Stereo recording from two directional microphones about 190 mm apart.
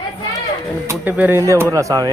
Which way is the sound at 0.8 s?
10° right (ahead or behind).